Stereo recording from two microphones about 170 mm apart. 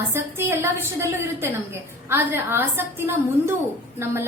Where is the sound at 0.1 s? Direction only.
15° right (ahead or behind).